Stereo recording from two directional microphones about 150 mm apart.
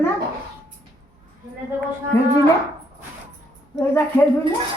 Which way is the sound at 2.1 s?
15° left (ahead or behind).